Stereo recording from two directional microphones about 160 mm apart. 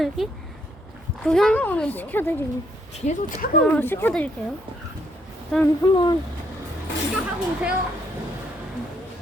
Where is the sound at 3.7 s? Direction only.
15° left (ahead or behind).